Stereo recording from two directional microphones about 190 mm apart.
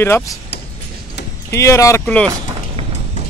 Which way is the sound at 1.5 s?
15° left (ahead or behind).